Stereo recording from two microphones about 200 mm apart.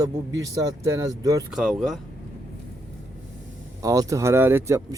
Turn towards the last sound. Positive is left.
turn(degrees=-10)  # may be behind; listen again after turning